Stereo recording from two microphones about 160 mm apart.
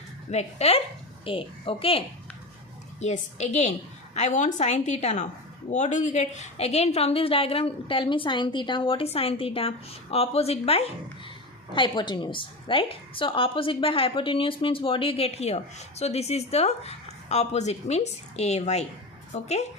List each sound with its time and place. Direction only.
0.3 s a woman's voice: 40° left (ahead or behind)
3.0 s a woman's voice: 45° left (ahead or behind)